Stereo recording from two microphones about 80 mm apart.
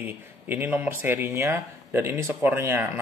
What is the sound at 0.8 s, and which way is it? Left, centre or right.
A man's voice, right.